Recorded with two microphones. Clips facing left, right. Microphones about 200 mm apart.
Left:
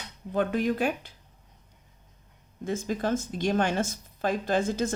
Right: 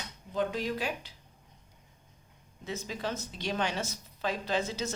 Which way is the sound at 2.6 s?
50° left (ahead or behind).